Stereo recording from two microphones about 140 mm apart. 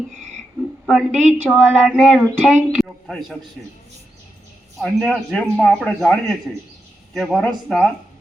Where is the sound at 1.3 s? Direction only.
10° right (ahead or behind).